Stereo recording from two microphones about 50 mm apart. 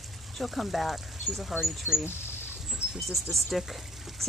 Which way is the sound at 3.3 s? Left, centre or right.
Centre.